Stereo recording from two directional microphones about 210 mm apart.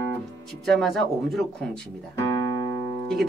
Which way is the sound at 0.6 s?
Centre (ahead or behind).